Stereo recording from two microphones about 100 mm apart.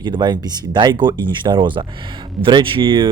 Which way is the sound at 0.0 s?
45° right (ahead or behind).